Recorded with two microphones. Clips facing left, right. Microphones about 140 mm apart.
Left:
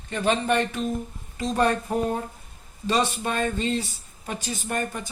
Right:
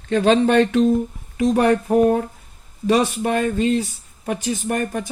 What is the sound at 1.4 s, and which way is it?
Speech, 70° right (ahead or behind).